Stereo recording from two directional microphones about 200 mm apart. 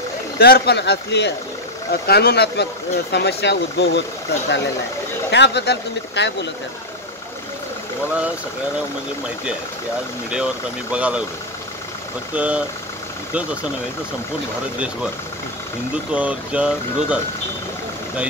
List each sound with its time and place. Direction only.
0.4 s speech: 55° left (ahead or behind)
5.3 s speech: 60° left (ahead or behind)
10.3 s speech: 5° right (ahead or behind)
12.4 s speech: 5° right (ahead or behind)
16.1 s speech: 5° right (ahead or behind)